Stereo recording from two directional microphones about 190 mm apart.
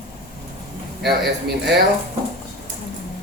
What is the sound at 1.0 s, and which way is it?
Speech, 60° right (ahead or behind).